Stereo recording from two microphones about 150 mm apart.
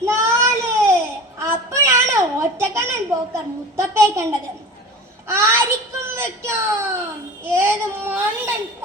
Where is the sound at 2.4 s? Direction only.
15° right (ahead or behind).